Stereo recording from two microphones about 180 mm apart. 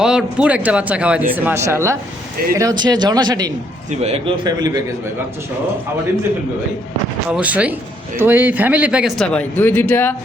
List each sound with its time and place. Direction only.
0.0 s a man's voice: 5° right (ahead or behind); by 3.5 s 20° right (ahead or behind)
4.0 s speech: 35° right (ahead or behind)
4.4 s speech: 25° right (ahead or behind)
7.3 s a man's voice: 5° right (ahead or behind); by 10.2 s 10° left (ahead or behind)